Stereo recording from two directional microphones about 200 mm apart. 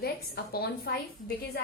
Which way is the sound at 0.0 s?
50° left (ahead or behind).